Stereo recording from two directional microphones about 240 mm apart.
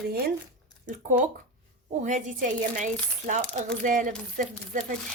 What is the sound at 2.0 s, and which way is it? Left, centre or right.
Speech, right.